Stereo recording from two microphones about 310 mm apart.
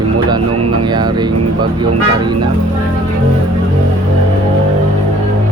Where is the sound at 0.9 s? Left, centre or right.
Centre.